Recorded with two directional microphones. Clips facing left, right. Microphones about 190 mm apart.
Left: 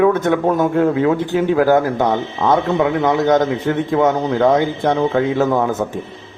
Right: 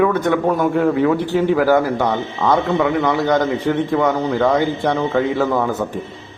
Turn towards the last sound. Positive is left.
turn(degrees=20)  # may be behind; listen again after turning